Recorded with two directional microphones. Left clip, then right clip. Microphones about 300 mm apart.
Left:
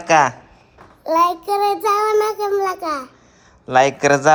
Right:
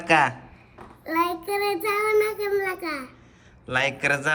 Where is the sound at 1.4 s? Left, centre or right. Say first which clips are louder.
Left 8 dB; centre.